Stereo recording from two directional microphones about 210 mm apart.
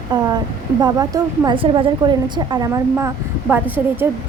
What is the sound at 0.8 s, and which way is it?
A woman's voice, 15° right (ahead or behind).